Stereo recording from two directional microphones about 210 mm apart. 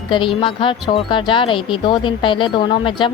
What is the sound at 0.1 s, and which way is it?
A woman's voice, 25° left (ahead or behind).